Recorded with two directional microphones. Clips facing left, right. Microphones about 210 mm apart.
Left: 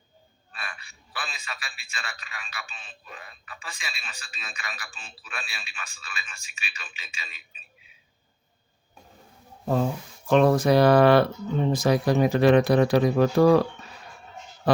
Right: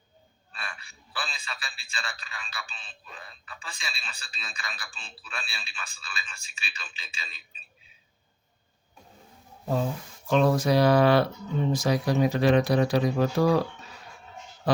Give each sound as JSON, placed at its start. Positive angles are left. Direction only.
{"t": 0.6, "sound": "a man's voice", "side_deg": -30}
{"t": 10.2, "sound": "speech", "side_deg": 55}